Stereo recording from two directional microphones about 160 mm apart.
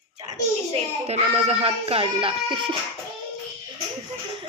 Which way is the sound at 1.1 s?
40° right (ahead or behind).